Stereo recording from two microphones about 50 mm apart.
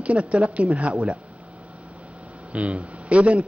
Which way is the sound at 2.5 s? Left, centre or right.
Right.